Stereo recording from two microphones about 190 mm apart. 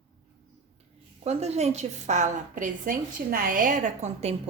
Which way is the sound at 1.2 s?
35° right (ahead or behind).